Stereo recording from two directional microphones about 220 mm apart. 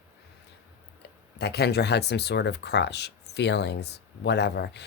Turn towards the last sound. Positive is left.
turn(degrees=50)  # may be behind; listen again after turning